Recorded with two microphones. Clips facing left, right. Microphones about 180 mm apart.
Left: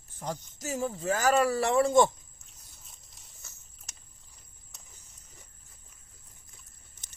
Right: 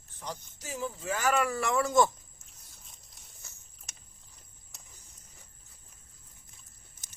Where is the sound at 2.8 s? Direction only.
Centre (ahead or behind).